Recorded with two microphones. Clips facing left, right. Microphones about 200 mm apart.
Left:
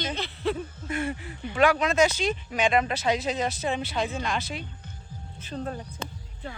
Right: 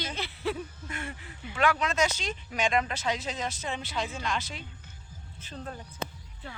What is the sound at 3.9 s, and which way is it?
Speech, 55° left (ahead or behind).